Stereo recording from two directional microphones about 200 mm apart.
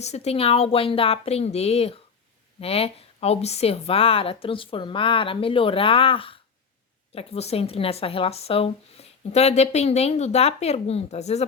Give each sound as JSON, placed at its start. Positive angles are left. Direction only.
{"t": 0.0, "sound": "a woman's voice", "side_deg": 30}